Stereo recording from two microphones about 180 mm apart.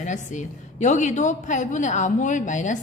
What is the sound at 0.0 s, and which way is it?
A woman's voice, 45° left (ahead or behind).